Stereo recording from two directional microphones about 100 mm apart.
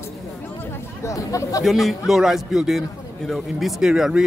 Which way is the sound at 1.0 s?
35° left (ahead or behind).